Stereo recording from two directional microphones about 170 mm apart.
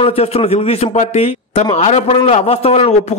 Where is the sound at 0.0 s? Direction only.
35° left (ahead or behind).